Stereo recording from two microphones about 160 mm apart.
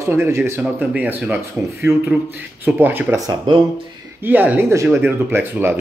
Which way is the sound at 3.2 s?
25° right (ahead or behind).